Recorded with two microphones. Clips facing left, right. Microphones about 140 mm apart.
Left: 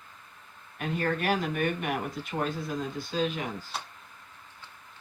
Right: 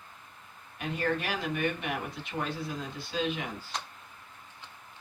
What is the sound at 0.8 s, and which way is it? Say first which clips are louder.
Speech: left 1 dB; 45° left (ahead or behind).